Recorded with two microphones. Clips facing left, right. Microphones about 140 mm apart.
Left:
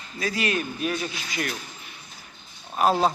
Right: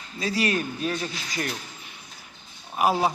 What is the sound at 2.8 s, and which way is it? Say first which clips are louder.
Speech: left 1 dB; 10° right (ahead or behind).